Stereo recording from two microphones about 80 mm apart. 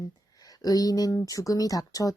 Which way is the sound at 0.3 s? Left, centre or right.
Left.